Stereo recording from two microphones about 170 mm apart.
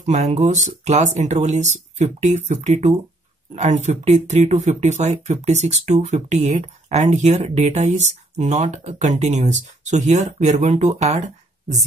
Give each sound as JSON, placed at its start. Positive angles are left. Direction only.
{"t": 0.0, "sound": "speech", "side_deg": -45}